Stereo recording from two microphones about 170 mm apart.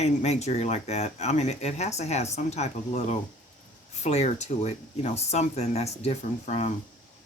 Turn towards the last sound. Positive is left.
turn(degrees=40)  # may be behind; listen again after turning